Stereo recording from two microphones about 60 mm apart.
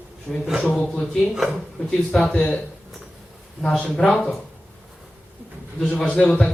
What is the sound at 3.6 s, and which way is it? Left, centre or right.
Speech, centre.